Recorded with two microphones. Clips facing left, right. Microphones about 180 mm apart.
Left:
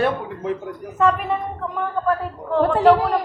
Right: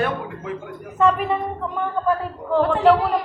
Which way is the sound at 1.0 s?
Centre (ahead or behind).